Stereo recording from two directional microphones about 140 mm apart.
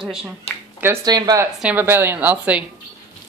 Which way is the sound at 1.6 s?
10° right (ahead or behind).